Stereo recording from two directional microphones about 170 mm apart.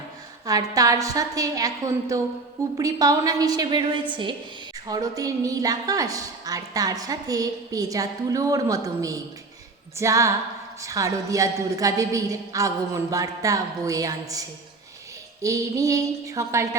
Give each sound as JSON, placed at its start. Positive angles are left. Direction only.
{"t": 0.4, "sound": "a woman's voice", "side_deg": -20}